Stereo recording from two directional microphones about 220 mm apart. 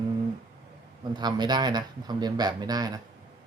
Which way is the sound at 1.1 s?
20° right (ahead or behind).